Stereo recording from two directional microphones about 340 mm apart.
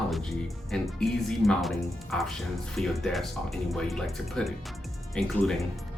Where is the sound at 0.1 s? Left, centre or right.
Centre.